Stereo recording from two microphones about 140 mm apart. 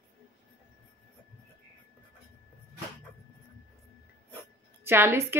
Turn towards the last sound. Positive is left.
turn(degrees=-15)  # may be behind; listen again after turning